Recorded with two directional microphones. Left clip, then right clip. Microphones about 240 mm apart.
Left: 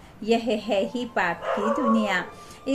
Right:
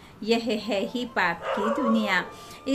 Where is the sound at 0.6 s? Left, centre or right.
Centre.